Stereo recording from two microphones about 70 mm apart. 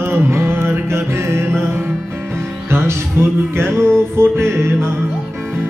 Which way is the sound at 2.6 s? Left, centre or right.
Right.